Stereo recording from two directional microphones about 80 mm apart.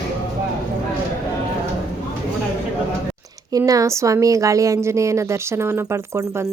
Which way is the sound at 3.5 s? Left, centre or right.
Right.